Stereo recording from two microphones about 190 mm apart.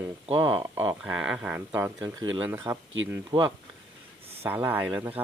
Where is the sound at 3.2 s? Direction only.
25° right (ahead or behind).